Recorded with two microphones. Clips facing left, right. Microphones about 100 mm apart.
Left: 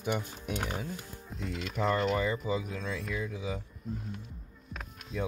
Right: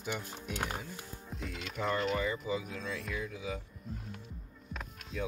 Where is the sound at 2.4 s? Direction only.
30° left (ahead or behind).